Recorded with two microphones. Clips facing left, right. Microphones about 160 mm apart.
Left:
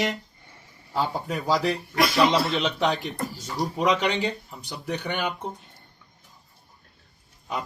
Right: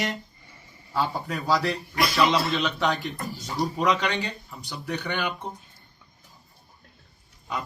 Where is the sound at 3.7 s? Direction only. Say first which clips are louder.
Left 3 dB; 20° left (ahead or behind).